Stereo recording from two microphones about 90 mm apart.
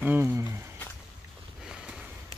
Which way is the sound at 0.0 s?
25° right (ahead or behind).